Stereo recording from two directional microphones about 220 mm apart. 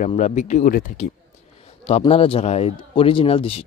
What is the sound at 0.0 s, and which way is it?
A man's voice, 30° left (ahead or behind).